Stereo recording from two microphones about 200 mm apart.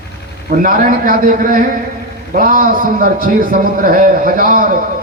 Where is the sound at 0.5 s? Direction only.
45° right (ahead or behind).